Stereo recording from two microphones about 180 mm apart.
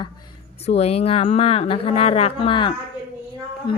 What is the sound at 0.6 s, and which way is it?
Speech, 35° left (ahead or behind).